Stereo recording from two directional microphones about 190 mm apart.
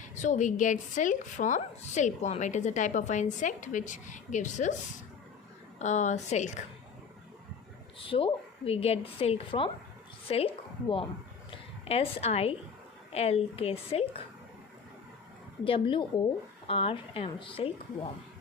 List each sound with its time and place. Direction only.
0.2 s a woman's voice: 40° left (ahead or behind)
5.8 s a woman's voice: 40° left (ahead or behind)
7.9 s a woman's voice: 30° left (ahead or behind)
15.6 s a woman's voice: 25° left (ahead or behind)